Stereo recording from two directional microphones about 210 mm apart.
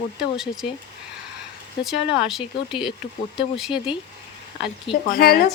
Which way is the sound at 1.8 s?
Centre (ahead or behind).